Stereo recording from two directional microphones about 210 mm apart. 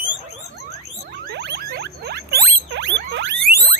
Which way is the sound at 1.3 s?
55° right (ahead or behind).